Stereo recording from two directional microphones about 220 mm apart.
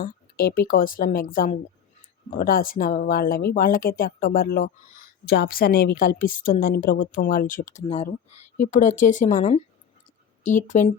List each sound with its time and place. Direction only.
0.0 s a woman's voice: 45° left (ahead or behind)